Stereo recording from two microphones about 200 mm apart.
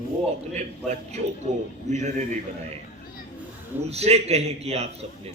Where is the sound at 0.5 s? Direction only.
35° right (ahead or behind).